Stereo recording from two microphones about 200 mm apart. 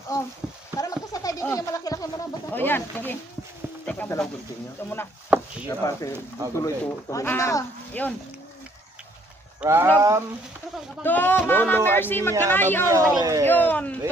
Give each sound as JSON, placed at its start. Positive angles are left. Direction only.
{"t": 0.1, "sound": "speech", "side_deg": 15}
{"t": 9.6, "sound": "speech", "side_deg": -10}
{"t": 11.0, "sound": "speech", "side_deg": 10}
{"t": 12.9, "sound": "speech", "side_deg": -15}
{"t": 13.4, "sound": "speech", "side_deg": 10}